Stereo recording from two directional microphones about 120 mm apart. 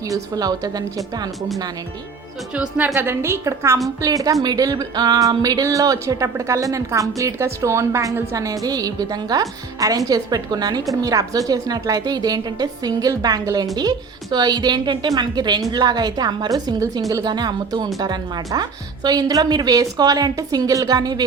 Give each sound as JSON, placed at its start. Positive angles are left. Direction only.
{"t": 0.1, "sound": "speech", "side_deg": -30}
{"t": 2.6, "sound": "speech", "side_deg": -15}